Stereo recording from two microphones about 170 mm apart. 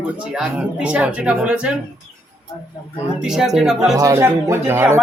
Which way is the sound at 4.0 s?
20° right (ahead or behind).